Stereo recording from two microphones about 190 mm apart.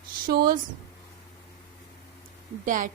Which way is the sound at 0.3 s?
50° right (ahead or behind).